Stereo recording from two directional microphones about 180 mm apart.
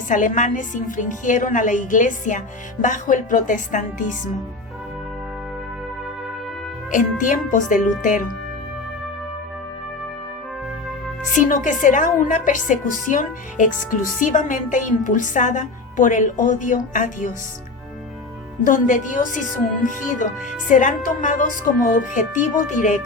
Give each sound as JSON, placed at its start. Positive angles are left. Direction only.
{"t": 0.1, "sound": "speech", "side_deg": 45}
{"t": 6.9, "sound": "speech", "side_deg": 45}
{"t": 11.3, "sound": "speech", "side_deg": 45}
{"t": 18.6, "sound": "speech", "side_deg": 45}